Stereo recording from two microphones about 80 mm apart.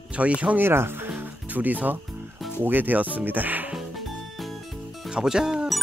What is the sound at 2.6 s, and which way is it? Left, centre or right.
Speech, right.